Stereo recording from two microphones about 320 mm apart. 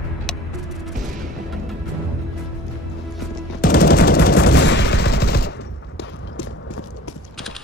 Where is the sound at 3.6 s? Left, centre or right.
Left.